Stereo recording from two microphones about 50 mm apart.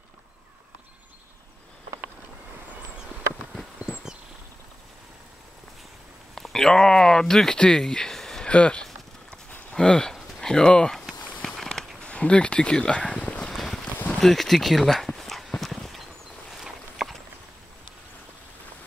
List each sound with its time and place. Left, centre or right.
6.3 s speech: centre
8.5 s speech: left
11.4 s a sound: centre
12.0 s speech: left
13.5 s a sound: centre
14.1 s speech: centre
15.0 s horse: centre
17.0 s walk: centre